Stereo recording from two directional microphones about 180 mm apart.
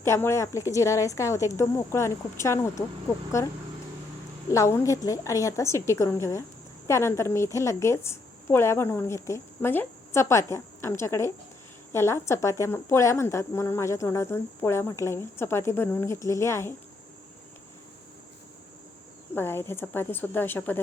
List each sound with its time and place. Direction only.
0.0 s a woman's voice: 15° left (ahead or behind)
4.5 s a woman's voice: 15° left (ahead or behind)
19.3 s a woman's voice: 10° left (ahead or behind)